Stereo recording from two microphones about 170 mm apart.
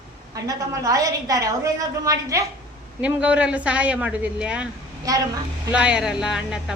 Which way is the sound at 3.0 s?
5° right (ahead or behind).